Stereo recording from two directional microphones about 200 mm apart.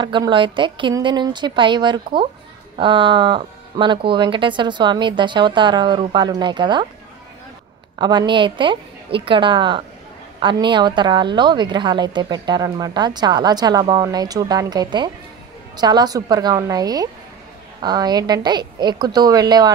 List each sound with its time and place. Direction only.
0.0 s a woman's voice: 25° right (ahead or behind)
8.0 s a woman's voice: 20° right (ahead or behind)